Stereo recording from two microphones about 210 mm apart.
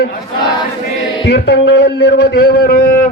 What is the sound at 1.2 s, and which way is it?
Speech, 55° left (ahead or behind).